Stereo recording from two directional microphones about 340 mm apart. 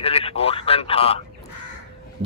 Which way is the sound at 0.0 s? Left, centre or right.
Centre.